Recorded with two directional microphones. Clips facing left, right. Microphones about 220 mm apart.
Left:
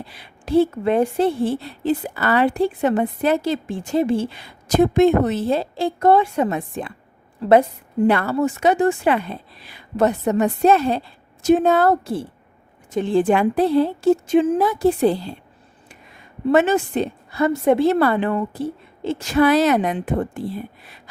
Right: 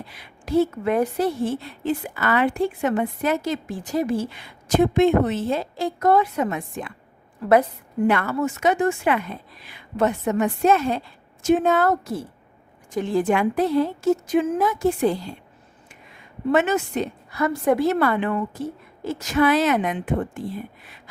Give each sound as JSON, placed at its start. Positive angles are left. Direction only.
{"t": 0.0, "sound": "a woman's voice", "side_deg": 30}